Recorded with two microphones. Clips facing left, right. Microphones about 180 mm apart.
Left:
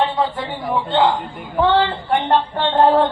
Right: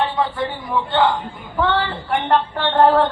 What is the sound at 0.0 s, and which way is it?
A man's voice, 20° left (ahead or behind).